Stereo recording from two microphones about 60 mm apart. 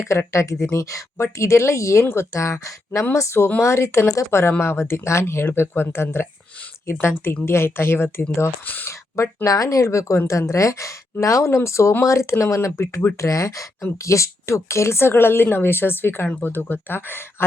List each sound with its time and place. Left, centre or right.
0.3 s speech: left
8.6 s speech: left
8.9 s speech: left
9.5 s speech: left
13.1 s speech: left